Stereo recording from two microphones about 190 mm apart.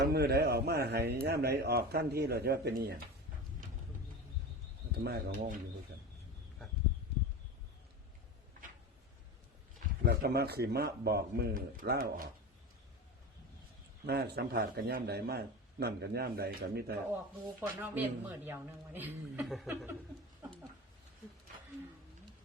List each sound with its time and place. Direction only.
0.0 s speech: 60° right (ahead or behind)
5.0 s speech: 60° right (ahead or behind)
10.1 s speech: 55° right (ahead or behind)
14.1 s speech: 55° right (ahead or behind)
17.7 s a man's voice: 10° right (ahead or behind)